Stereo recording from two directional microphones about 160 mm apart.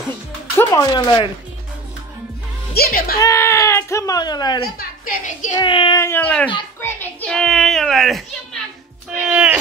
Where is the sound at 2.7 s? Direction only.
70° left (ahead or behind).